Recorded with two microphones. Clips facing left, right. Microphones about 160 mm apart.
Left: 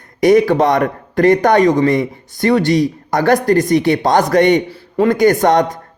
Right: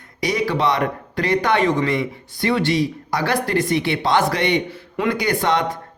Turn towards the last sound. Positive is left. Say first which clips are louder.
# left 8 dB
turn(degrees=45)  # may be behind; listen again after turning